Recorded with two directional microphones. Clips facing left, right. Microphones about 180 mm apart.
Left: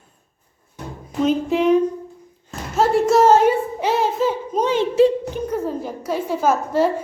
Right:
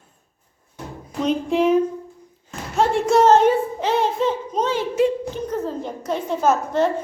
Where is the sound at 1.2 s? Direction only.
Centre (ahead or behind).